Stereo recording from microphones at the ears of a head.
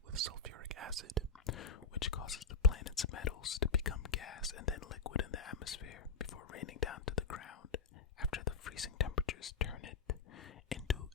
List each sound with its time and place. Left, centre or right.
0.1 s whispering: right
1.5 s whispering: left